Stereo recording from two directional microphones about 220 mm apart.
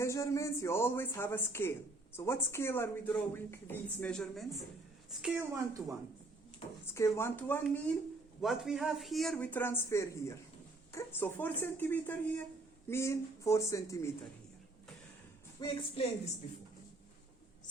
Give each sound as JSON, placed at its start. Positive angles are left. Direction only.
{"t": 0.0, "sound": "speech", "side_deg": 15}
{"t": 5.2, "sound": "a woman's voice", "side_deg": -10}
{"t": 6.9, "sound": "speech", "side_deg": 10}
{"t": 8.4, "sound": "speech", "side_deg": 0}
{"t": 15.6, "sound": "a woman's voice", "side_deg": 25}